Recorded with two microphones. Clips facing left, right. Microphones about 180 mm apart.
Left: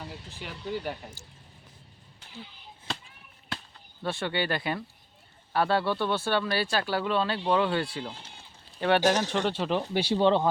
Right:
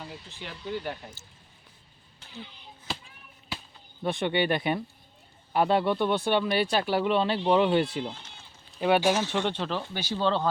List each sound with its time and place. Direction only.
0.0 s speech: 5° left (ahead or behind)
4.0 s speech: 15° right (ahead or behind)
8.8 s speech: 5° right (ahead or behind)
9.3 s speech: 5° left (ahead or behind)
9.9 s speech: 30° left (ahead or behind)
10.2 s speech: 20° left (ahead or behind)